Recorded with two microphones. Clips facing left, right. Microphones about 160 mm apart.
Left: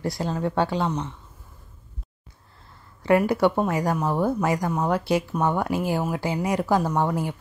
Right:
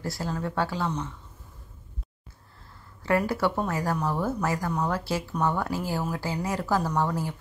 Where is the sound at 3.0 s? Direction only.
20° left (ahead or behind).